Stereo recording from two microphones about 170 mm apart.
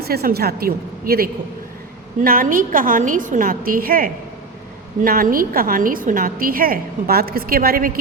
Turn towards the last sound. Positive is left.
turn(degrees=-60)  # may be behind; listen again after turning